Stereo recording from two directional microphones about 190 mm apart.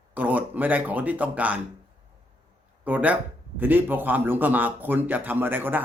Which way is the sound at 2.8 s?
10° right (ahead or behind).